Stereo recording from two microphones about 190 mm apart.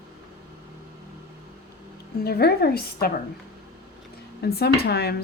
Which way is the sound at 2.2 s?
55° left (ahead or behind).